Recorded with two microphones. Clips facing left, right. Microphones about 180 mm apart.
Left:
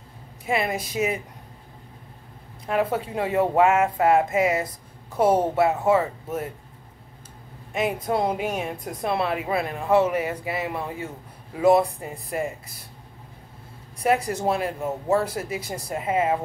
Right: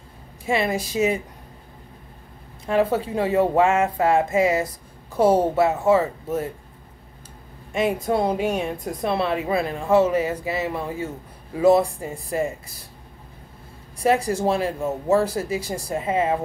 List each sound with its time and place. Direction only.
0.5 s a woman's voice: 30° right (ahead or behind)
2.7 s a woman's voice: 30° right (ahead or behind)
7.7 s a woman's voice: 25° right (ahead or behind)
14.0 s a woman's voice: 30° right (ahead or behind)